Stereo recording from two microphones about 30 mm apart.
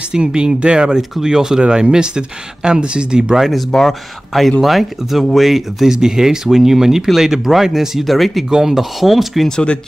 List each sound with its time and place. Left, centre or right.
0.1 s speech: right
1.2 s speech: centre
3.7 s speech: centre
4.4 s speech: centre
5.9 s speech: centre
8.0 s speech: centre
8.5 s speech: right
8.7 s speech: centre